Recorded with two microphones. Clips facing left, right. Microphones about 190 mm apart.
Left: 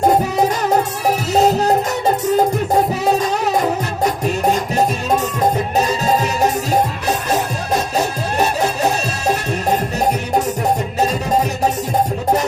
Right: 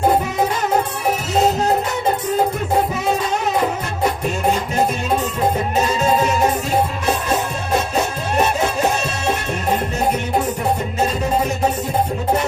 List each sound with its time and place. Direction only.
0.8 s music: 40° left (ahead or behind)
6.0 s music: 35° left (ahead or behind)